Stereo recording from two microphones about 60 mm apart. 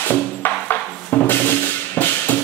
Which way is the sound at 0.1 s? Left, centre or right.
Left.